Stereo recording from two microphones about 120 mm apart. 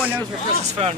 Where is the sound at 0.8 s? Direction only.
60° right (ahead or behind).